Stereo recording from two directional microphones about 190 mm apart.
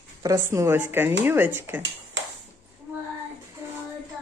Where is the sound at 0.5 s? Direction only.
15° right (ahead or behind).